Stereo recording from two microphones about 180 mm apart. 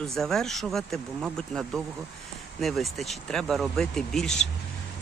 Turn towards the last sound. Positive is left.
turn(degrees=5)  # may be behind; listen again after turning